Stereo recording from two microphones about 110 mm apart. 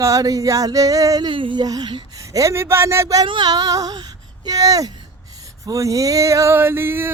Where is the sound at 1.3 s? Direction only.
50° right (ahead or behind).